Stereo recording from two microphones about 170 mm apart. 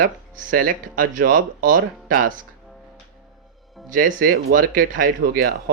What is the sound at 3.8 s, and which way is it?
Speech, 55° right (ahead or behind).